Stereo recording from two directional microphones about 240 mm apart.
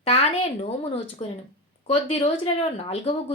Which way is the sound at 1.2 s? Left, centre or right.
Left.